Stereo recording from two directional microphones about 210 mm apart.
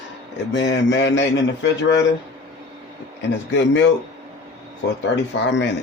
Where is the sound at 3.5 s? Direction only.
60° left (ahead or behind).